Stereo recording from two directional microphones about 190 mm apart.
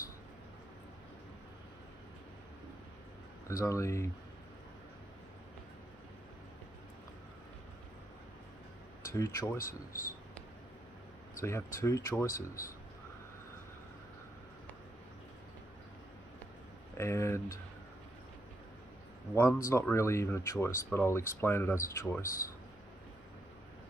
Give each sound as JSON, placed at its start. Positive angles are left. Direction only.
{"t": 3.4, "sound": "speech", "side_deg": 15}
{"t": 9.1, "sound": "speech", "side_deg": 15}
{"t": 11.4, "sound": "speech", "side_deg": 15}
{"t": 16.9, "sound": "speech", "side_deg": 15}
{"t": 19.3, "sound": "speech", "side_deg": 15}